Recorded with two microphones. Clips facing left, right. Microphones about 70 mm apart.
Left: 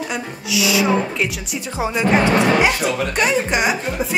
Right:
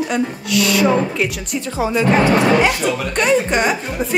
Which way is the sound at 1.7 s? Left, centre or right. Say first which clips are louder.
Right 3 dB; centre.